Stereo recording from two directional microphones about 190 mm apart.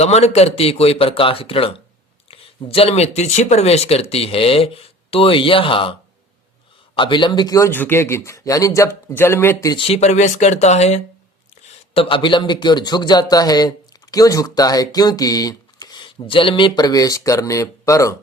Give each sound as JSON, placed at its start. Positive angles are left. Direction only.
{"t": 0.0, "sound": "a man's voice", "side_deg": 35}
{"t": 9.8, "sound": "a man's voice", "side_deg": 35}